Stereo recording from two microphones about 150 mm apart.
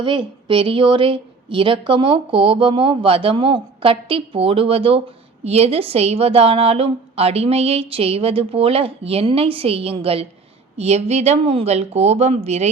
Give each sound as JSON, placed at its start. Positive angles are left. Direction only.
{"t": 0.0, "sound": "a woman's voice", "side_deg": -35}